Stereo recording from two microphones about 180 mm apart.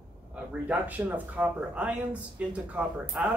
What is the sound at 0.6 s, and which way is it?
Speech, 10° right (ahead or behind).